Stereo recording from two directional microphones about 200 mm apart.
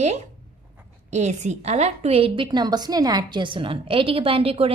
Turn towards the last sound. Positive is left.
turn(degrees=-30)  # may be behind; listen again after turning